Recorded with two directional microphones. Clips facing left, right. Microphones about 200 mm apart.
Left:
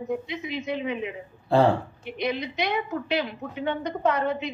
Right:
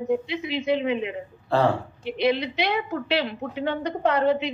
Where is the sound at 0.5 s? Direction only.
30° right (ahead or behind).